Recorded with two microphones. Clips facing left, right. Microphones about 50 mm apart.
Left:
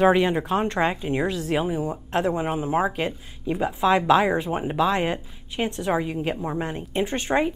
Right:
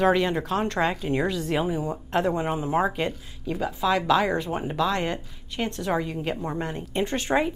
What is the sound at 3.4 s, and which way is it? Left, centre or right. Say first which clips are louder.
Speech: left 3 dB; left.